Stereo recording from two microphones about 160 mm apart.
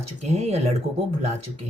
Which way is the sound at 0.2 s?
45° right (ahead or behind).